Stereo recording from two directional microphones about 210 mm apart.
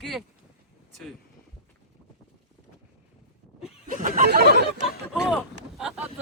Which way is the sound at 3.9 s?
40° right (ahead or behind).